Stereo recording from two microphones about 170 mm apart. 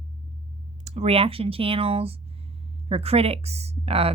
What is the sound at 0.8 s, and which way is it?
Speech, 40° right (ahead or behind).